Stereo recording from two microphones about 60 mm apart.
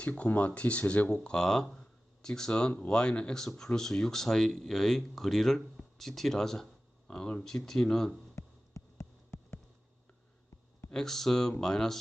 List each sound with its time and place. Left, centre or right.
0.0 s speech: left
8.4 s a sound: left
10.9 s speech: centre